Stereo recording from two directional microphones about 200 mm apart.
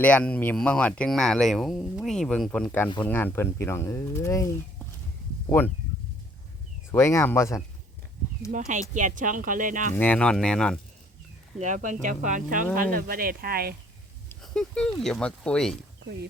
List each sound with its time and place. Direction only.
0.0 s speech: 5° left (ahead or behind)
6.9 s speech: 15° left (ahead or behind)
8.5 s speech: 40° right (ahead or behind)
9.9 s speech: 10° left (ahead or behind)
11.6 s speech: 40° right (ahead or behind)
14.3 s speech: 5° left (ahead or behind)